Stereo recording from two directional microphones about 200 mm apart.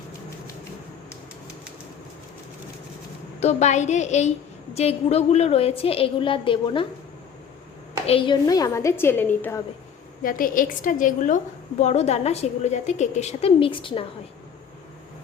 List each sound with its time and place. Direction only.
3.4 s a woman's voice: 35° left (ahead or behind)
8.0 s a woman's voice: 30° left (ahead or behind)
8.4 s a woman's voice: 15° left (ahead or behind)
10.2 s a woman's voice: 45° left (ahead or behind); by 14.0 s 25° left (ahead or behind)